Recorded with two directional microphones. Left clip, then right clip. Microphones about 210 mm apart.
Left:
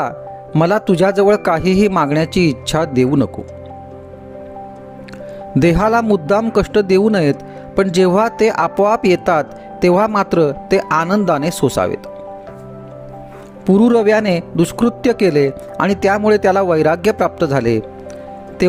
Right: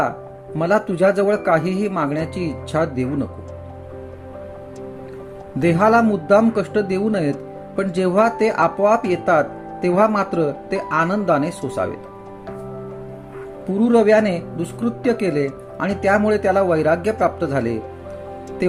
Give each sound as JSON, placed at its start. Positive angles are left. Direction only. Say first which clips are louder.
{"t": 0.5, "sound": "speech", "louder": "left 4 dB", "side_deg": 50}
{"t": 5.5, "sound": "speech", "louder": "left 2 dB", "side_deg": 50}
{"t": 13.7, "sound": "speech", "louder": "left 3 dB", "side_deg": 50}